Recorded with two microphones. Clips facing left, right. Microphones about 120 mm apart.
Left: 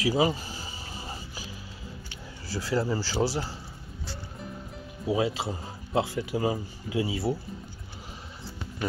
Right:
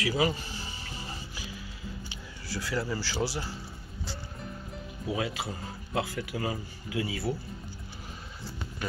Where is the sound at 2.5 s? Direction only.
35° left (ahead or behind).